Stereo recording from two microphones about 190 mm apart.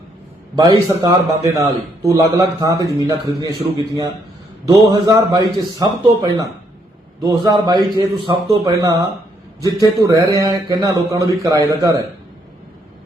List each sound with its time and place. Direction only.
0.5 s a man's voice: 20° right (ahead or behind)